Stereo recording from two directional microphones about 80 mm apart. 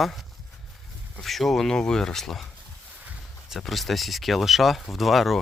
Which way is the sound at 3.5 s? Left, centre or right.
Centre.